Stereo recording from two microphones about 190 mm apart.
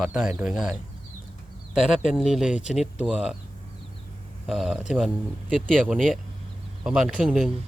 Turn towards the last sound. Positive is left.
turn(degrees=-5)  # may be behind; listen again after turning